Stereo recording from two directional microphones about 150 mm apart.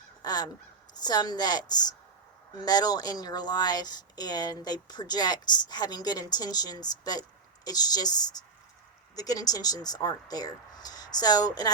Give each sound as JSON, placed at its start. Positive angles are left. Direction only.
{"t": 0.2, "sound": "honk", "side_deg": 25}
{"t": 0.9, "sound": "speech", "side_deg": 25}